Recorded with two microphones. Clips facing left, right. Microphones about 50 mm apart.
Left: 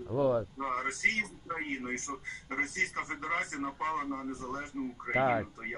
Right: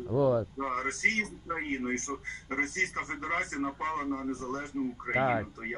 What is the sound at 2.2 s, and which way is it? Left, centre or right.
A man's voice, right.